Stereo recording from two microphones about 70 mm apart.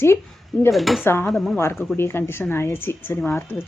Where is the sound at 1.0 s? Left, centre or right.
Left.